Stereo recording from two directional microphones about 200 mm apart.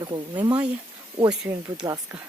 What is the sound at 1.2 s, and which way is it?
Speech, 5° right (ahead or behind).